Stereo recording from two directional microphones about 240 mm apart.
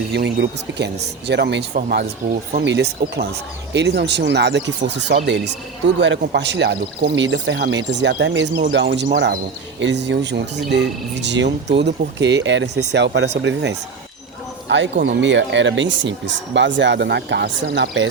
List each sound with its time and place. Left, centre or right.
0.1 s speech: right